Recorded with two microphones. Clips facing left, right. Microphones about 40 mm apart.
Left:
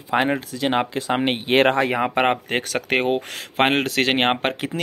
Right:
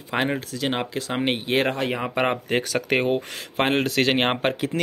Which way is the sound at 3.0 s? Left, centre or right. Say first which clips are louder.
Left 1 dB; left.